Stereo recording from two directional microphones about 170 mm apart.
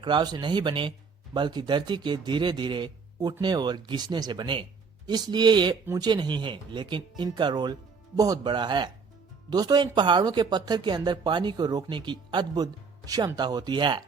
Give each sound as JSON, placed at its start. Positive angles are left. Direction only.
{"t": 0.0, "sound": "speech", "side_deg": -25}